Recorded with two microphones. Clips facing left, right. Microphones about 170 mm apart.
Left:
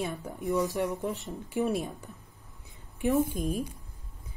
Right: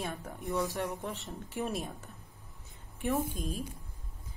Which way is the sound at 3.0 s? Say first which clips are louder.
Left 6 dB; 45° left (ahead or behind).